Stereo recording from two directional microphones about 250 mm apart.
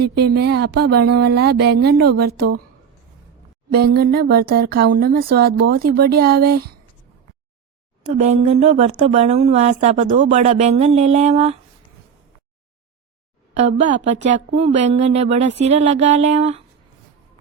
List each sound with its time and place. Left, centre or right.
0.0 s speech: right
3.7 s speech: right
8.0 s speech: right
13.5 s speech: right